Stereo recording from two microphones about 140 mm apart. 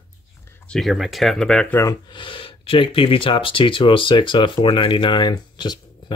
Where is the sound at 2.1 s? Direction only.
35° left (ahead or behind).